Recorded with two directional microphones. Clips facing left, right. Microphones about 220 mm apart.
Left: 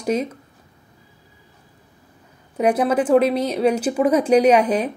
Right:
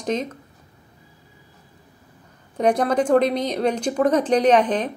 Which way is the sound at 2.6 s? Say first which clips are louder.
Left 1 dB; 5° left (ahead or behind).